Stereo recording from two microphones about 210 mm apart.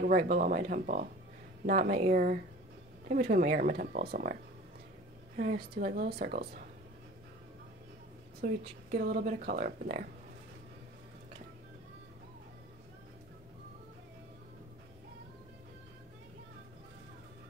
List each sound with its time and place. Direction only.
0.0 s speech: 45° right (ahead or behind)
8.4 s a woman's voice: 35° right (ahead or behind)